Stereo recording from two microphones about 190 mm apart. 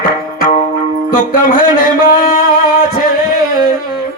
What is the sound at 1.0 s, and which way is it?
Music, 45° left (ahead or behind).